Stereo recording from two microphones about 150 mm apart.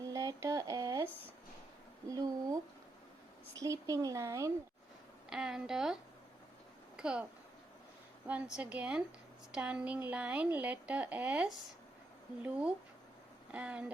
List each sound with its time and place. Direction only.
0.0 s a sound: 20° right (ahead or behind)
3.5 s a woman's voice: 20° right (ahead or behind)
5.3 s a woman's voice: 5° right (ahead or behind)
8.3 s speech: 10° right (ahead or behind)